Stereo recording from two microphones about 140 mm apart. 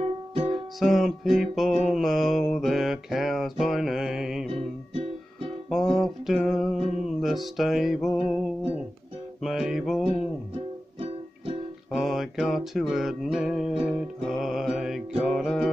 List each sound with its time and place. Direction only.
0.0 s music: 50° right (ahead or behind)
0.5 s music: centre (ahead or behind)
1.9 s mantra: centre (ahead or behind)
4.5 s music: 40° right (ahead or behind)
5.7 s music: centre (ahead or behind)
9.4 s music: 5° right (ahead or behind)
11.9 s music: centre (ahead or behind)